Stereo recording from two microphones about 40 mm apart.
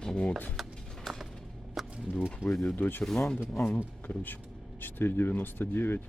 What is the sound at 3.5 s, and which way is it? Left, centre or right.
Speech, left.